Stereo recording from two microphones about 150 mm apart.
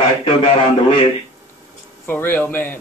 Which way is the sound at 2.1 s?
15° left (ahead or behind).